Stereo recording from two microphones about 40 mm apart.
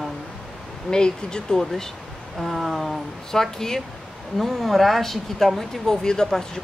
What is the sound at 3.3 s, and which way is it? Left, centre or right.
Speech, centre.